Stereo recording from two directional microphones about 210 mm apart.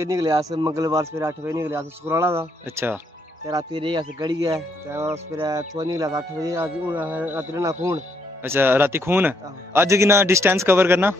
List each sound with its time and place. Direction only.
0.0 s speech: 15° right (ahead or behind)